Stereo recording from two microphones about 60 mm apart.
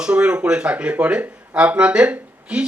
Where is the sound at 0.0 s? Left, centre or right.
Centre.